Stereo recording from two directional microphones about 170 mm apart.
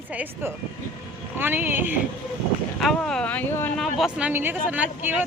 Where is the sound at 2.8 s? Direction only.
5° left (ahead or behind).